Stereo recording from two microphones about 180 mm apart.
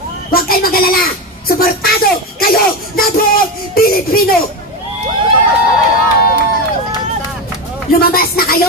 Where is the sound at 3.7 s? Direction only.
55° left (ahead or behind).